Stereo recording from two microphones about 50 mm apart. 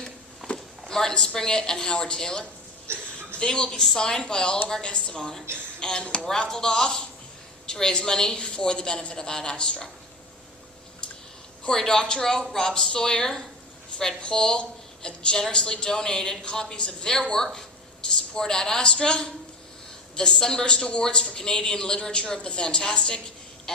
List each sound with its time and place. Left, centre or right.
0.0 s a woman's voice: centre
11.6 s a woman's voice: centre